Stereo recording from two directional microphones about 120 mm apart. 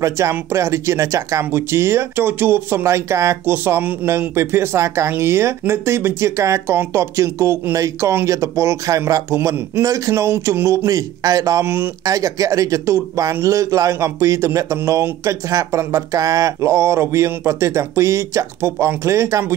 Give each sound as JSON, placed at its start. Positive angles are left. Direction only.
{"t": 0.0, "sound": "speech", "side_deg": -25}